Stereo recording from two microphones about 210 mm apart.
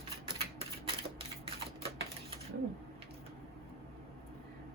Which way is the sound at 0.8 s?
25° right (ahead or behind).